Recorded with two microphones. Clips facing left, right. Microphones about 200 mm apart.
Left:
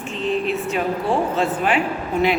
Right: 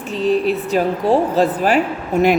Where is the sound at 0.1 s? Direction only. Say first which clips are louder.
Right 6 dB; 35° right (ahead or behind).